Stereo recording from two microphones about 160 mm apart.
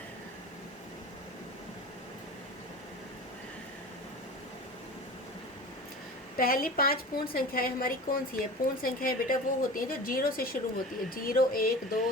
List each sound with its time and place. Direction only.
6.3 s a woman's voice: 65° left (ahead or behind)